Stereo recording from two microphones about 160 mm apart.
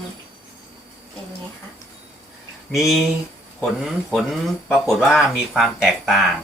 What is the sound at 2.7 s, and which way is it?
Speech, centre (ahead or behind).